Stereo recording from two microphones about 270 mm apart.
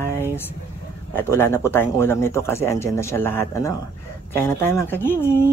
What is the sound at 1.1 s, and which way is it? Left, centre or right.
Speech, centre.